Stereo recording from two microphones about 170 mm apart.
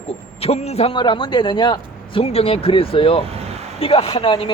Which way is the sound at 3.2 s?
35° right (ahead or behind).